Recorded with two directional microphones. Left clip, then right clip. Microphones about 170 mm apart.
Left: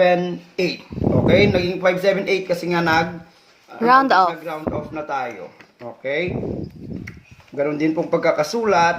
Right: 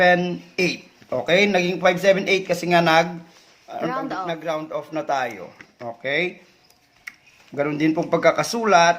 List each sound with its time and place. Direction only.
0.0 s speech: 30° right (ahead or behind)
3.8 s speech: 55° left (ahead or behind)
4.3 s speech: 45° right (ahead or behind)
7.5 s speech: 40° right (ahead or behind)